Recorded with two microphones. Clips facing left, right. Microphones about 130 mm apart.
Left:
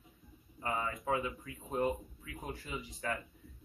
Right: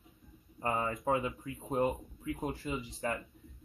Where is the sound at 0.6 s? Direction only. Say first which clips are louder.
Right 3 dB; 35° right (ahead or behind).